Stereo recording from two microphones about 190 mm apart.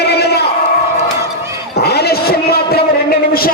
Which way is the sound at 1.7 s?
60° left (ahead or behind).